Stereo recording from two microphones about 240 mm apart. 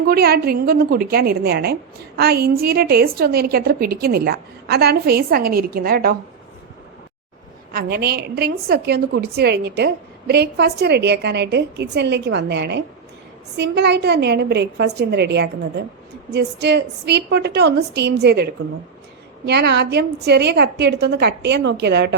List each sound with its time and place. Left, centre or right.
0.0 s a woman's voice: right
7.7 s a woman's voice: right